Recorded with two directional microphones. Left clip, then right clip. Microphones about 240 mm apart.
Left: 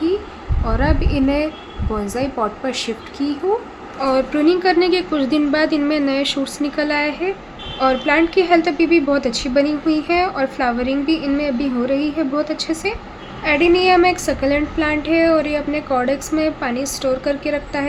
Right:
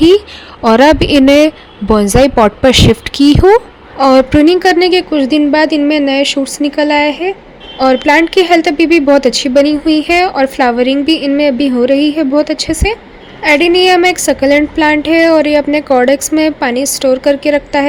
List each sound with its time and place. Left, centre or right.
0.6 s a woman's voice: right